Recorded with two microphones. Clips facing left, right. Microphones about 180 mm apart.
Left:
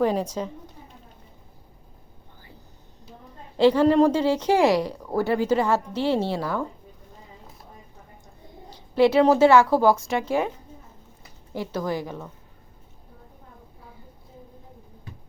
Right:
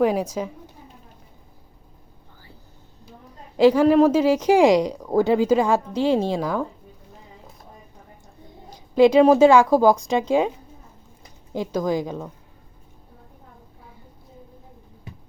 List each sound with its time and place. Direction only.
0.0 s a woman's voice: 10° right (ahead or behind)
3.6 s a woman's voice: 10° right (ahead or behind)
8.7 s a woman's voice: 15° right (ahead or behind)